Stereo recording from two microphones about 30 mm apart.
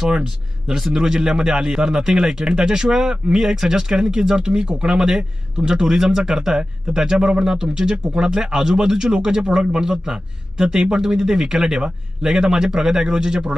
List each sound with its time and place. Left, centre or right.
0.7 s a man's voice: centre